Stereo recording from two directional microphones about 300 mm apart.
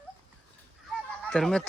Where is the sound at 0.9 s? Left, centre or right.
Centre.